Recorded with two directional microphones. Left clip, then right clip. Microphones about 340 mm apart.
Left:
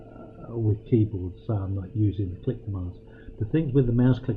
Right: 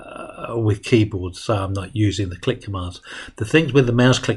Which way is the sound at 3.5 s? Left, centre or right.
Centre.